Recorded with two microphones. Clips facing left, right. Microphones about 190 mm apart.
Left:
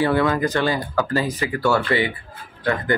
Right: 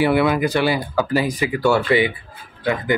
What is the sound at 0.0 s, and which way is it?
Speech, 15° right (ahead or behind).